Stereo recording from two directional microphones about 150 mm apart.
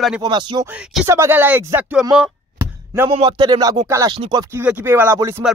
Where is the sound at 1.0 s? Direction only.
20° right (ahead or behind).